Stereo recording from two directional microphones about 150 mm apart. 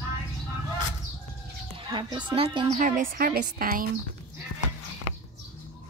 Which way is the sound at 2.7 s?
60° right (ahead or behind).